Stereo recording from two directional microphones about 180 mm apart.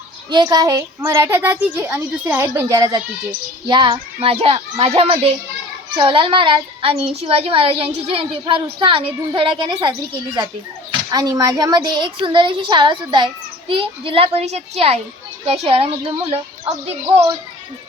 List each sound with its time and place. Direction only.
0.3 s a woman's voice: 25° right (ahead or behind)
11.1 s a woman's voice: 20° right (ahead or behind)